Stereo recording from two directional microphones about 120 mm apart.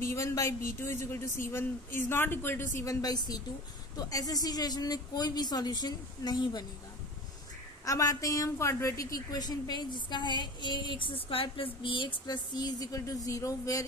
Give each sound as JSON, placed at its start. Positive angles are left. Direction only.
{"t": 0.0, "sound": "a woman's voice", "side_deg": 25}
{"t": 7.8, "sound": "a woman's voice", "side_deg": 30}